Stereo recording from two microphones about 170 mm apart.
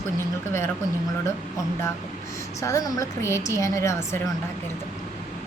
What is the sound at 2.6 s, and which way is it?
A woman's voice, 20° left (ahead or behind).